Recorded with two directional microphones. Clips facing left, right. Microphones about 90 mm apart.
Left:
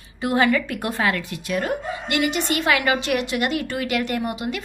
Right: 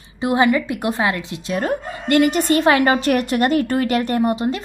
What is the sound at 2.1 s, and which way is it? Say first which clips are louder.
A woman's voice: right 8 dB; 45° right (ahead or behind).